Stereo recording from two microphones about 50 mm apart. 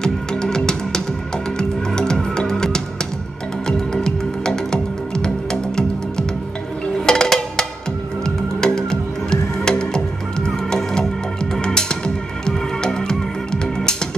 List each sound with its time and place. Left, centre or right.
0.0 s music: centre